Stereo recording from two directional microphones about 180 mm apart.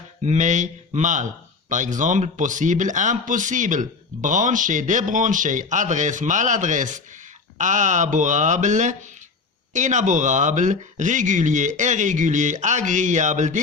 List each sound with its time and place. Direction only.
0.3 s speech: 45° right (ahead or behind)